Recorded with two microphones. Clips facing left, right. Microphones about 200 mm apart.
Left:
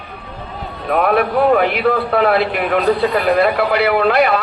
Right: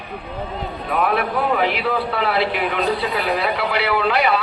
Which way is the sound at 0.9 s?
55° left (ahead or behind).